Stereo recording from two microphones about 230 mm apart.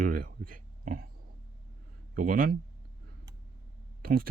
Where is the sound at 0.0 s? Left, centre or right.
Right.